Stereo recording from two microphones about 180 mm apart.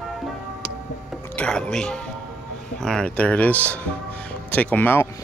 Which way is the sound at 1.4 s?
5° left (ahead or behind).